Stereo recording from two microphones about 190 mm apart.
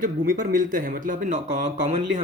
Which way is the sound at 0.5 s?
45° right (ahead or behind).